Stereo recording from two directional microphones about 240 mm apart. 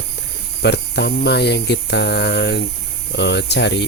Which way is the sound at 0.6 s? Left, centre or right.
Left.